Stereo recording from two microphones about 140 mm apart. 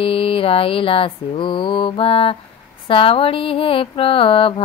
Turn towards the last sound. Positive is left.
turn(degrees=40)  # may be behind; listen again after turning